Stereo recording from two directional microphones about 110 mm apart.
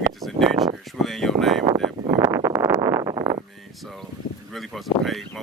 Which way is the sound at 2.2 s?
30° right (ahead or behind).